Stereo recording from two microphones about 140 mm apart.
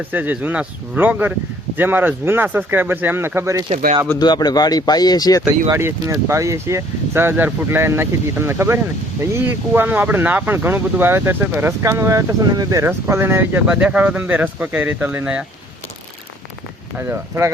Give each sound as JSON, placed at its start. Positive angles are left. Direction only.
{"t": 0.1, "sound": "speech", "side_deg": -10}
{"t": 4.2, "sound": "speech", "side_deg": 30}
{"t": 5.7, "sound": "speech", "side_deg": -20}
{"t": 17.1, "sound": "speech", "side_deg": -20}